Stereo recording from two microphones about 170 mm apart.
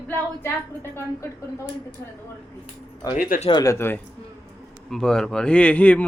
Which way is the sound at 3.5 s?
20° left (ahead or behind).